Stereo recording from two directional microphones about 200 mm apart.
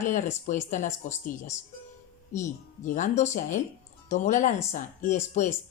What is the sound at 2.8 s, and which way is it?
A woman's voice, 40° left (ahead or behind).